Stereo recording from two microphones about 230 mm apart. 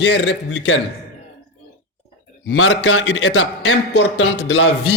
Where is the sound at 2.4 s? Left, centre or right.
Left.